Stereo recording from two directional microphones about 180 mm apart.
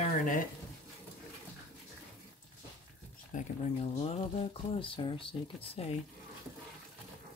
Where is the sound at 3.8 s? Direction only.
30° left (ahead or behind).